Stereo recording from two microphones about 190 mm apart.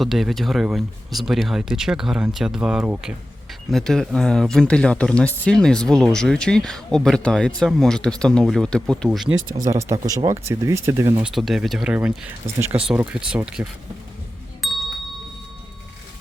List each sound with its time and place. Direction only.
0.0 s speech: centre (ahead or behind)
9.6 s speech: 15° right (ahead or behind)
11.3 s speech: centre (ahead or behind)
14.6 s a sound: centre (ahead or behind)